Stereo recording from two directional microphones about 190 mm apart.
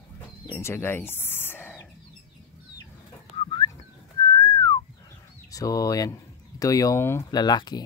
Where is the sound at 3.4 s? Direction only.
25° left (ahead or behind).